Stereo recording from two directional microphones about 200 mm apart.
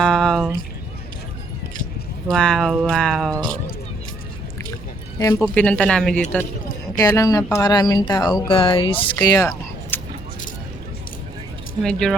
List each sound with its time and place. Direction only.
0.0 s a sound: centre (ahead or behind)
2.3 s music: 5° left (ahead or behind)
5.2 s speech: 15° left (ahead or behind)
6.9 s speech: 15° left (ahead or behind)
9.1 s a sound: 15° left (ahead or behind)
11.8 s music: 5° left (ahead or behind)